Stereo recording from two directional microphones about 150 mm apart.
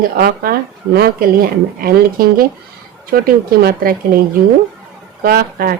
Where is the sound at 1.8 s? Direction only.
75° right (ahead or behind).